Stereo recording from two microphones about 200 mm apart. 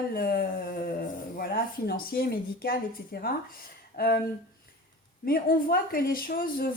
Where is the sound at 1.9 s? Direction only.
50° left (ahead or behind).